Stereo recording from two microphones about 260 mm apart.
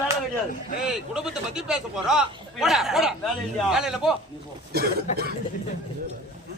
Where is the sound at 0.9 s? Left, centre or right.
Centre.